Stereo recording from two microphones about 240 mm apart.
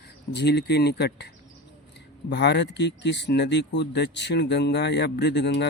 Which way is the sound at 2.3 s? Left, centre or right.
Left.